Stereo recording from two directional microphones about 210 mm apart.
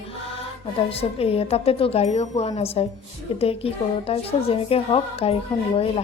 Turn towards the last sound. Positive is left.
turn(degrees=25)  # may be behind; listen again after turning